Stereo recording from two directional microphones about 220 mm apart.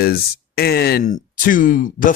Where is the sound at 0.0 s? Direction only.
45° left (ahead or behind).